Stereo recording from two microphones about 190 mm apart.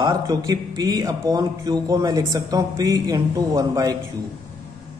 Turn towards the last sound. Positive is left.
turn(degrees=-20)  # may be behind; listen again after turning